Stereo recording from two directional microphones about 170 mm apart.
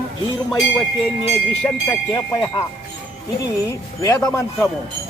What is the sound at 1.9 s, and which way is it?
A man's voice, 20° left (ahead or behind).